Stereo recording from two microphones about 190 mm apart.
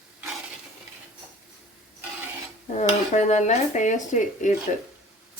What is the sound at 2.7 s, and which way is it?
Speech, 40° left (ahead or behind).